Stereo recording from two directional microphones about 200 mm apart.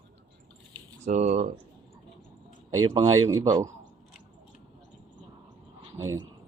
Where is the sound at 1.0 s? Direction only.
35° right (ahead or behind).